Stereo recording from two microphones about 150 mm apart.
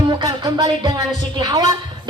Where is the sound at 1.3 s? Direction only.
30° right (ahead or behind).